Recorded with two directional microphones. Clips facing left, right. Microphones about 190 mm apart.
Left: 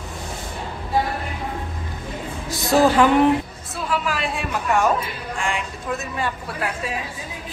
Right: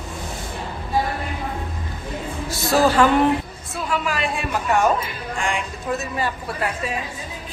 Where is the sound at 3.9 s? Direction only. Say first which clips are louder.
Even; centre (ahead or behind).